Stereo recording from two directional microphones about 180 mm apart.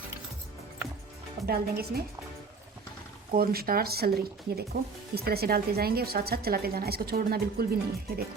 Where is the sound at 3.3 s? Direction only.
55° right (ahead or behind).